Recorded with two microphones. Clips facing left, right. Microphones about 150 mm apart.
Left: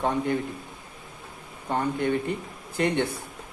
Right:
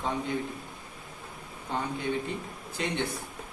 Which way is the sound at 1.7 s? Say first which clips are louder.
Left 6 dB; 55° left (ahead or behind).